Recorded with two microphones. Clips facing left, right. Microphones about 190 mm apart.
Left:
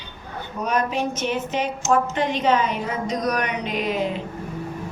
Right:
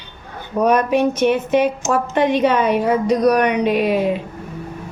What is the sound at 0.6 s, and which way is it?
A woman's voice, 60° right (ahead or behind).